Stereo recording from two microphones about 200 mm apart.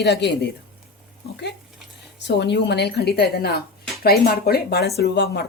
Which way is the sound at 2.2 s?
55° left (ahead or behind).